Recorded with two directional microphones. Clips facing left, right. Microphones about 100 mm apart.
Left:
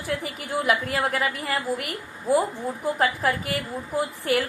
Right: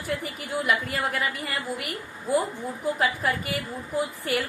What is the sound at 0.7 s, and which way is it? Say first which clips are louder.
A woman's voice: left 3 dB; 60° left (ahead or behind).